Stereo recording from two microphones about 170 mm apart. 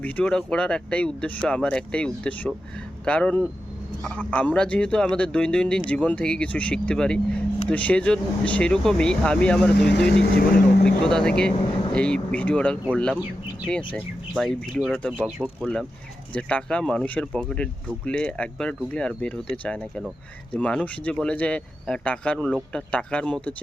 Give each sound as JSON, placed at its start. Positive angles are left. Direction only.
{"t": 0.0, "sound": "speech", "side_deg": 5}
{"t": 9.9, "sound": "speech", "side_deg": 80}
{"t": 10.8, "sound": "speech", "side_deg": 5}
{"t": 15.6, "sound": "speech", "side_deg": 5}